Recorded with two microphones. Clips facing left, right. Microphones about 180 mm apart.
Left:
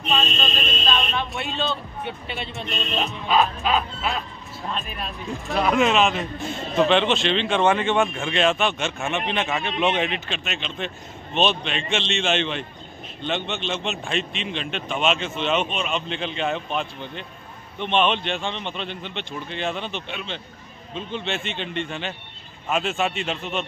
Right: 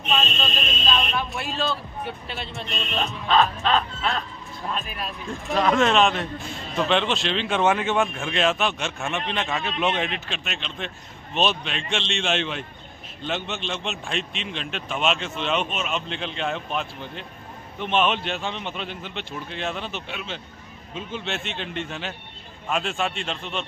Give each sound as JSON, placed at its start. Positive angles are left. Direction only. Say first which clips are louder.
{"t": 0.8, "sound": "a man's voice", "louder": "even", "side_deg": -5}